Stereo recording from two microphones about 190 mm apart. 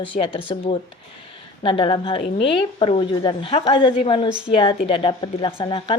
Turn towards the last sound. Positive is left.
turn(degrees=25)  # may be behind; listen again after turning